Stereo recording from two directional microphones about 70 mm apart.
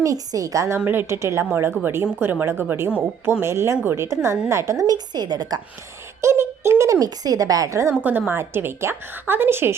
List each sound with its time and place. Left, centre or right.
0.0 s a woman's voice: right
0.9 s a woman's voice: right
4.9 s a woman's voice: right
6.2 s a woman's voice: right
7.0 s a woman's voice: right
8.3 s a woman's voice: right